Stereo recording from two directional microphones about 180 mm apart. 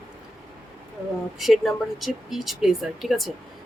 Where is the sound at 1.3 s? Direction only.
Centre (ahead or behind).